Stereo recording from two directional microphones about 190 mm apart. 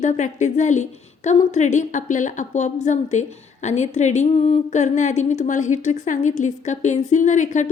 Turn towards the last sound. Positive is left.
turn(degrees=40)  # may be behind; listen again after turning